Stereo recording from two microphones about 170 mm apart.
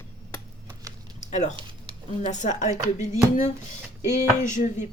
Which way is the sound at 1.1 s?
45° left (ahead or behind).